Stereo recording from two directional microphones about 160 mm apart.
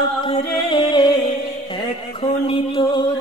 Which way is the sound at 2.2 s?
35° left (ahead or behind).